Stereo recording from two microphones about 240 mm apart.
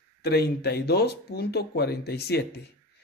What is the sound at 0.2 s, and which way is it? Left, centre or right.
Speech, left.